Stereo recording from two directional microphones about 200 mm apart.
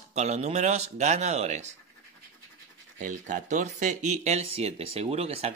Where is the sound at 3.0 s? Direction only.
40° right (ahead or behind).